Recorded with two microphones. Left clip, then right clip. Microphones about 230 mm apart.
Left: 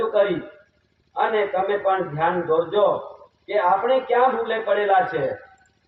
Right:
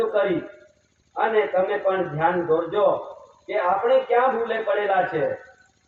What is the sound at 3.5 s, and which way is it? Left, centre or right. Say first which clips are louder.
A man's voice: left 1 dB; left.